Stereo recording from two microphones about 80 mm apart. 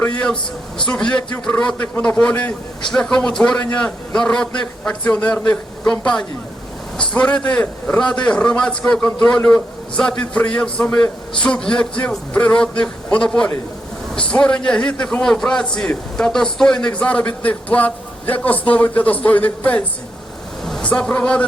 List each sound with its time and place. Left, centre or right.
0.9 s a man's voice: centre
20.8 s a man's voice: centre